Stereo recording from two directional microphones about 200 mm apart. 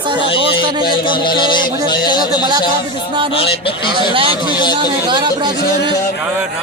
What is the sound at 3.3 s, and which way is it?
Music, 25° left (ahead or behind).